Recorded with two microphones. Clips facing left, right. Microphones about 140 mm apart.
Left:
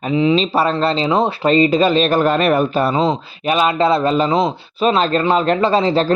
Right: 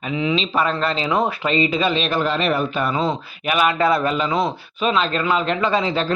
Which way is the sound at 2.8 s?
30° left (ahead or behind).